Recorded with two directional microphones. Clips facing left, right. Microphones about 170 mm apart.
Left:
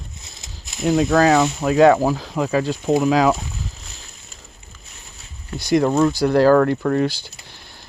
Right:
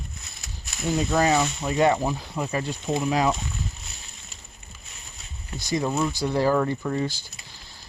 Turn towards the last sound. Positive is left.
turn(degrees=75)  # may be behind; listen again after turning